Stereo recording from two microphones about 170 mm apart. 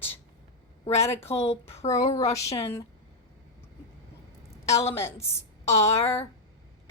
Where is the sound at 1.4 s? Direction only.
35° left (ahead or behind).